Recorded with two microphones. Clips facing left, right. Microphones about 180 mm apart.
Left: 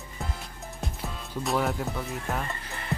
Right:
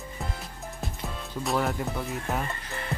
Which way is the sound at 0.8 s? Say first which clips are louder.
Even; centre (ahead or behind).